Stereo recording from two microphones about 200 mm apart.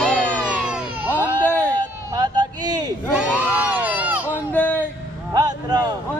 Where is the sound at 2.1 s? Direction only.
20° right (ahead or behind).